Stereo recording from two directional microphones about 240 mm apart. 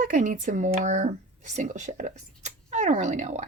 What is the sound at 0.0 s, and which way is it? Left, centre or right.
Speech, right.